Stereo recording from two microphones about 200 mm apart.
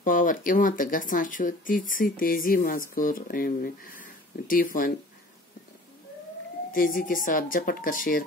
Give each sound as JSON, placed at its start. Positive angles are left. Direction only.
{"t": 0.0, "sound": "speech", "side_deg": 40}
{"t": 6.7, "sound": "speech", "side_deg": 45}